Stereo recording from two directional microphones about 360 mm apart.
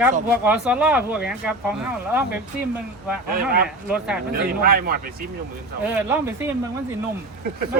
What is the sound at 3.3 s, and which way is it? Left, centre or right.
Speech, right.